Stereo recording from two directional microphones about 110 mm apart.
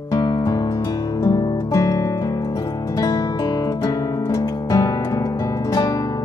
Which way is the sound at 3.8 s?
30° left (ahead or behind).